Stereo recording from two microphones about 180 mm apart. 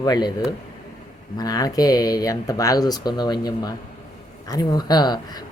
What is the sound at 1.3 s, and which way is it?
Speech, 20° left (ahead or behind).